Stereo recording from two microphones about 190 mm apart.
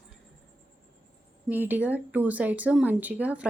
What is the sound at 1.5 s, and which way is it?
Speech, 10° right (ahead or behind).